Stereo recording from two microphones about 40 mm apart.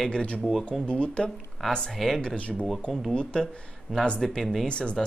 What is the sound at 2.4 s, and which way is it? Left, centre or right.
Speech, left.